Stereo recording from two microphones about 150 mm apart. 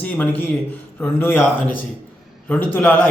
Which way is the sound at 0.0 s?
10° left (ahead or behind).